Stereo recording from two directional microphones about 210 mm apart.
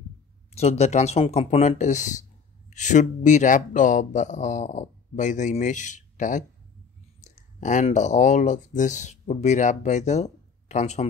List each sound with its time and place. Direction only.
0.6 s speech: 30° left (ahead or behind)